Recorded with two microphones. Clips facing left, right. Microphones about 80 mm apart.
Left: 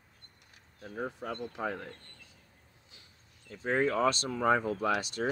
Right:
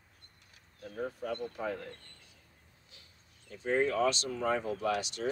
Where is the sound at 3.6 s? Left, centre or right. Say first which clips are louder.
Left 1 dB; left.